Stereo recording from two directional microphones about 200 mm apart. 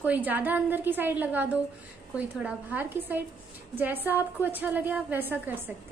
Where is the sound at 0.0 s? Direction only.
10° right (ahead or behind).